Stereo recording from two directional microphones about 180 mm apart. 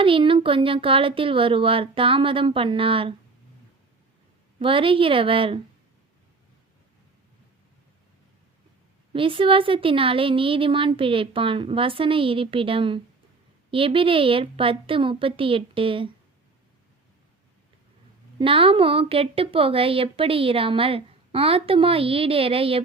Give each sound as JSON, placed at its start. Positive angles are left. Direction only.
{"t": 0.0, "sound": "speech", "side_deg": -30}
{"t": 4.6, "sound": "speech", "side_deg": -30}
{"t": 9.1, "sound": "speech", "side_deg": -30}
{"t": 18.3, "sound": "speech", "side_deg": -30}